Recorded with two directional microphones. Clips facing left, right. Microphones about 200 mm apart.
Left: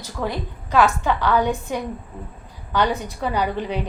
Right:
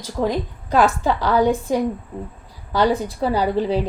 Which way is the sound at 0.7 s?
35° right (ahead or behind).